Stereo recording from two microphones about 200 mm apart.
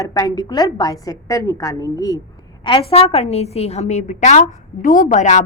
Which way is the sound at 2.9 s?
30° left (ahead or behind).